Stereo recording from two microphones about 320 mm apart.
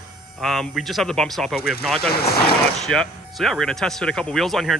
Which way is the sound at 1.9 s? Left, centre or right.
Left.